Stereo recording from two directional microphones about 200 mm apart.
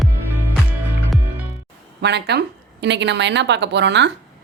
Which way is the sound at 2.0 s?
60° right (ahead or behind).